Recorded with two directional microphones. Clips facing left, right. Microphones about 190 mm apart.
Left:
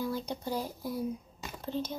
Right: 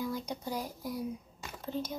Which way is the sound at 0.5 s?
30° left (ahead or behind).